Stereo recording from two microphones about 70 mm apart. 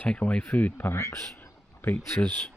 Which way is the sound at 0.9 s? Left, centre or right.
Left.